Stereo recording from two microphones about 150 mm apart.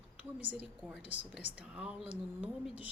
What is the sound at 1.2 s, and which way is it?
A woman's voice, 10° right (ahead or behind).